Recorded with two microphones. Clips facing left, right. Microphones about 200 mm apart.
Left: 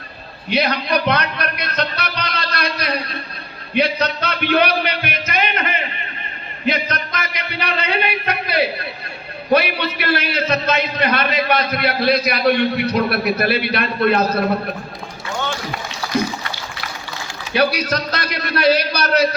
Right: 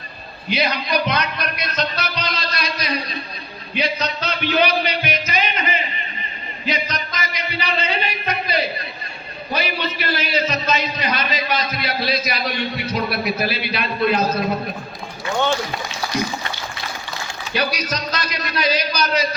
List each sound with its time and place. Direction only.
0.5 s music: 60° left (ahead or behind)
3.8 s a sound: 60° left (ahead or behind)
6.7 s music: 60° left (ahead or behind)
9.5 s a man's voice: 60° left (ahead or behind)
17.5 s a man's voice: 60° left (ahead or behind)